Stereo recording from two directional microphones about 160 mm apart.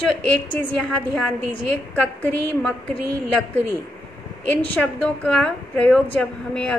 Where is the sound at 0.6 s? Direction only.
10° left (ahead or behind).